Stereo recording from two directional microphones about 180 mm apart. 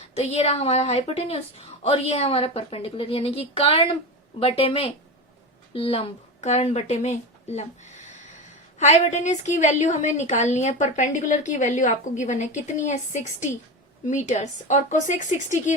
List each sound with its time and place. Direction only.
0.2 s a woman's voice: 35° left (ahead or behind)